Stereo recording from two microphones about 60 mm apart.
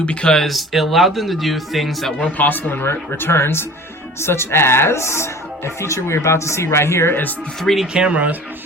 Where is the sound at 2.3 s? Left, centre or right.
Left.